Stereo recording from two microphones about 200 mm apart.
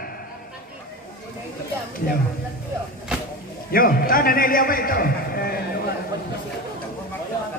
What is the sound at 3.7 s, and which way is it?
A man's voice, 45° left (ahead or behind).